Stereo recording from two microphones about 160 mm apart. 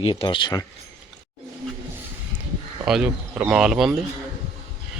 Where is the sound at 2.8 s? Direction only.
5° right (ahead or behind).